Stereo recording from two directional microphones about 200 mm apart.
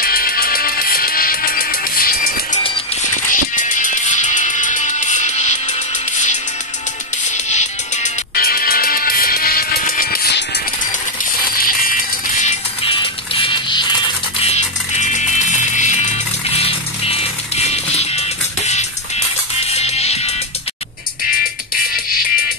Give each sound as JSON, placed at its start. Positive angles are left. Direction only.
{"t": 0.0, "sound": "music", "side_deg": 45}
{"t": 11.5, "sound": "music", "side_deg": 45}
{"t": 14.4, "sound": "music", "side_deg": 35}